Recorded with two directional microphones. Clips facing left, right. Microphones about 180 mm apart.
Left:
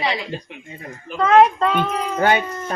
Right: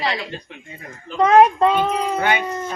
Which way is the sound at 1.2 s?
15° right (ahead or behind).